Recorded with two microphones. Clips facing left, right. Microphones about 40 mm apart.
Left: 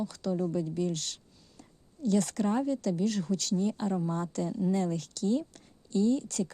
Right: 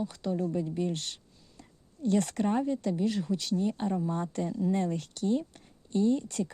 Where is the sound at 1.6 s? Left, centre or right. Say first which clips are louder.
Right 1 dB; right.